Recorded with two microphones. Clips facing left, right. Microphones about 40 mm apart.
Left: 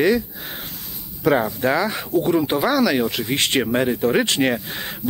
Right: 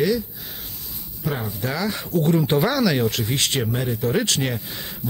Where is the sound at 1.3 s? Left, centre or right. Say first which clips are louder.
Left 10 dB; left.